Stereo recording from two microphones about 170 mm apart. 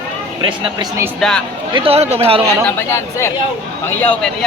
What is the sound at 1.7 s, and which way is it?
Speech, 35° right (ahead or behind).